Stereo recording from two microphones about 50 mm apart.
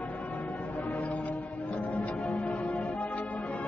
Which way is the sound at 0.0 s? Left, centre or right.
Left.